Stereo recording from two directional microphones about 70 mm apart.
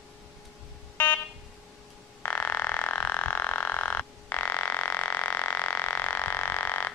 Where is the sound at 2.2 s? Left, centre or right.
Left.